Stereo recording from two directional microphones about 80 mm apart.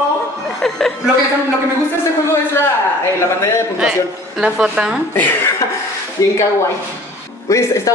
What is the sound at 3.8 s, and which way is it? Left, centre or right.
A woman's voice, centre.